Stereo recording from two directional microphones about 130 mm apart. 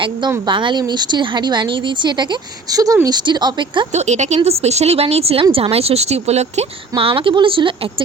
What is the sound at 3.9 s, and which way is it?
Speech, 65° right (ahead or behind).